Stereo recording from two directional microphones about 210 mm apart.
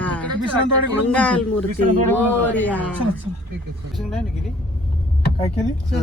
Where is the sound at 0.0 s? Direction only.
5° left (ahead or behind).